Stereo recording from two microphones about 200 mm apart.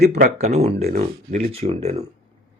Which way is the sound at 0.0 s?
35° right (ahead or behind).